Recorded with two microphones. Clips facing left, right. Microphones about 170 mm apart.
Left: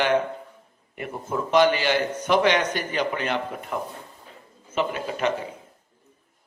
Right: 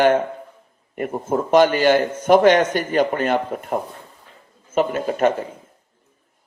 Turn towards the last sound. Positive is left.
turn(degrees=-45)  # may be behind; listen again after turning